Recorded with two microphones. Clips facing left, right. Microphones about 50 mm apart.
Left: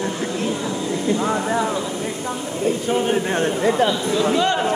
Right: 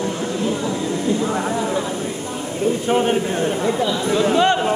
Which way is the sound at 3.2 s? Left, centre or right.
Left.